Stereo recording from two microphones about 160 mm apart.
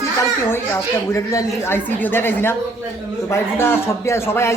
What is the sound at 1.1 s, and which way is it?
Speech, 20° left (ahead or behind).